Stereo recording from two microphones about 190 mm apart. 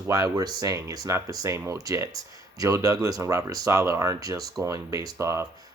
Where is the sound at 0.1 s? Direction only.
20° right (ahead or behind).